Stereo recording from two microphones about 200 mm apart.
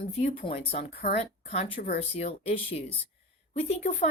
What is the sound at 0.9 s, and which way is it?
Speech, 55° left (ahead or behind).